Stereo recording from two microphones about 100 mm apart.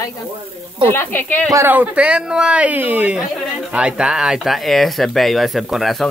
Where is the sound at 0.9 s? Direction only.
20° left (ahead or behind).